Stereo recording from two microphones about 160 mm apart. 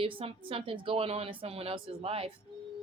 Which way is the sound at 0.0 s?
35° right (ahead or behind).